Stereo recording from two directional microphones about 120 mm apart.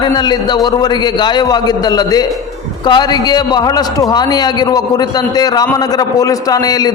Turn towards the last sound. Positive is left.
turn(degrees=35)  # may be behind; listen again after turning